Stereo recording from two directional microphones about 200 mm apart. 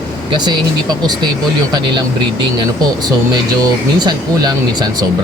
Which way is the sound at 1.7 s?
20° right (ahead or behind).